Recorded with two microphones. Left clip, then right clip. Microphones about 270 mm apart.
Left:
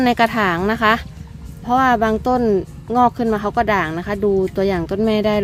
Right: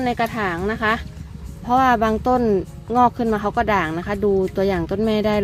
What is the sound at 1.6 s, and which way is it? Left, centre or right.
Speech, centre.